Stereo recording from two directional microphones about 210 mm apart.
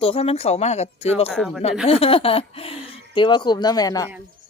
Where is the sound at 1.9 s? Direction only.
25° left (ahead or behind).